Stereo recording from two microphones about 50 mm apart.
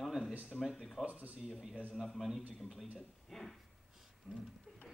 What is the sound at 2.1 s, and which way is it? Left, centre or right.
Speech, centre.